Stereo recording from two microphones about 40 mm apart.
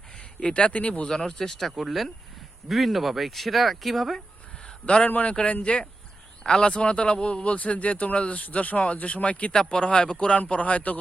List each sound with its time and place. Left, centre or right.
0.4 s speech: left
1.0 s speech: centre
1.7 s speech: centre
5.0 s speech: left
5.3 s speech: left